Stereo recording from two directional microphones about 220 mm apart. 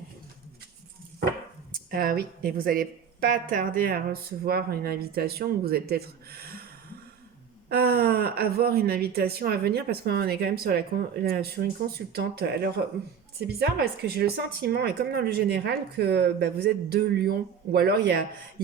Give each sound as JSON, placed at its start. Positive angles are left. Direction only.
{"t": 1.7, "sound": "speech", "side_deg": -40}
{"t": 7.7, "sound": "speech", "side_deg": -45}
{"t": 13.6, "sound": "speech", "side_deg": -45}